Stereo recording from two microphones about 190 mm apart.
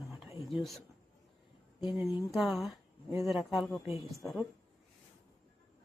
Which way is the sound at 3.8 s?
30° left (ahead or behind).